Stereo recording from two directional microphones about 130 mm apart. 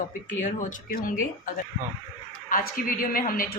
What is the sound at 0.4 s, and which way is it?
Speech, 90° left.